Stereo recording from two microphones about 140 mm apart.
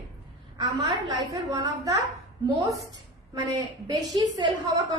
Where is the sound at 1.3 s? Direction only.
25° right (ahead or behind).